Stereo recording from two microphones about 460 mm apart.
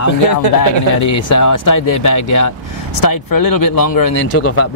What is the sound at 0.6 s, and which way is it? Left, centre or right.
Speech, left.